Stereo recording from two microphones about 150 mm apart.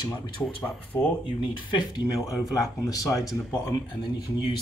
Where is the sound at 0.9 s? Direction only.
15° left (ahead or behind).